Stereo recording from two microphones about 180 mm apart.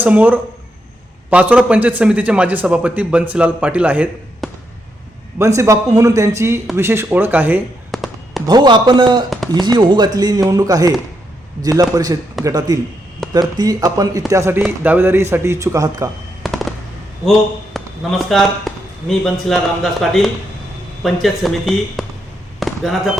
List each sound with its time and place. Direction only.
0.0 s a man's voice: 10° right (ahead or behind)
7.9 s a sound: centre (ahead or behind)
8.4 s a man's voice: 25° right (ahead or behind)
16.4 s fireworks: centre (ahead or behind)
17.7 s a man's voice: centre (ahead or behind)
22.6 s basketball bounce: centre (ahead or behind)